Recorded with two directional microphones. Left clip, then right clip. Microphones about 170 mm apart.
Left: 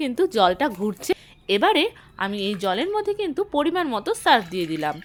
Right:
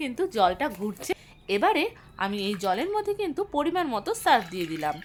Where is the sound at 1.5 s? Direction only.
20° left (ahead or behind).